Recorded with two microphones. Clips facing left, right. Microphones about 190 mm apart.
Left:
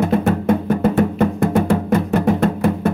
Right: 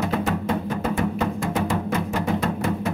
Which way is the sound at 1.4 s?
60° left (ahead or behind).